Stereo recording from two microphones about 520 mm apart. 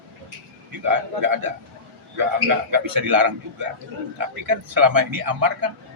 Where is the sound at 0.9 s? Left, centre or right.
Right.